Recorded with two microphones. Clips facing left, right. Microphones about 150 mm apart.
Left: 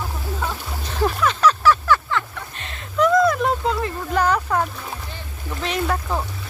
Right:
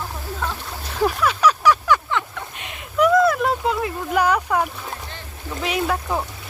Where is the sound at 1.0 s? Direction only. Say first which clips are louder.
Even; 5° right (ahead or behind).